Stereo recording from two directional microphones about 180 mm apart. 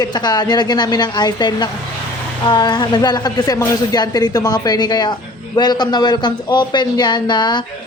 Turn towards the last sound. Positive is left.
turn(degrees=25)  # may be behind; listen again after turning